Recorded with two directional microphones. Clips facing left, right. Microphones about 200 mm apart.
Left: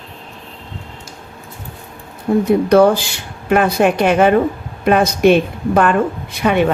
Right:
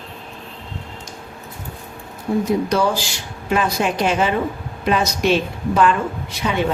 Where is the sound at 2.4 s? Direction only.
55° left (ahead or behind).